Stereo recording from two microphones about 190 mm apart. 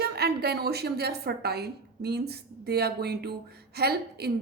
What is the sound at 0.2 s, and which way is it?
A woman's voice, 55° right (ahead or behind).